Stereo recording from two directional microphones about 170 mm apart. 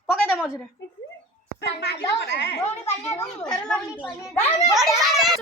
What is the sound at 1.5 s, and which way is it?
A woman's voice, 80° left.